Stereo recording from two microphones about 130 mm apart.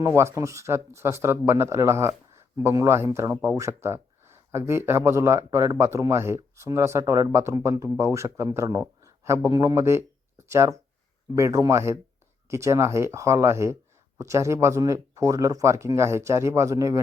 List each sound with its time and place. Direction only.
0.0 s speech: 20° right (ahead or behind)